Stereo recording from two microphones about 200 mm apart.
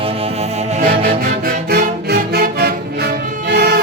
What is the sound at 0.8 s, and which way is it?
Music, 45° right (ahead or behind).